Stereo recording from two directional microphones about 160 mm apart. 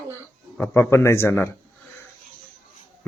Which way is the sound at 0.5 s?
10° left (ahead or behind).